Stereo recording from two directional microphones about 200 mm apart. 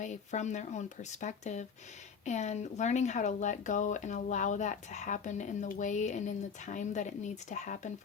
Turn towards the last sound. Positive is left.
turn(degrees=35)  # may be behind; listen again after turning